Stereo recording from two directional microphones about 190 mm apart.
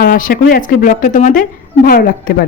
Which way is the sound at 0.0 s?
50° left (ahead or behind).